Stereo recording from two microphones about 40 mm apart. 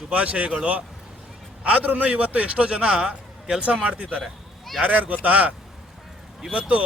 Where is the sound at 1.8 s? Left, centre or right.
Right.